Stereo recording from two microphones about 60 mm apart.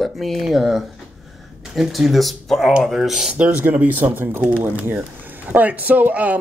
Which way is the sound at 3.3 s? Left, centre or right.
Right.